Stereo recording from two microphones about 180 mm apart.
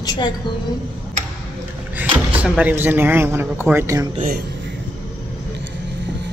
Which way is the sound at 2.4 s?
5° right (ahead or behind).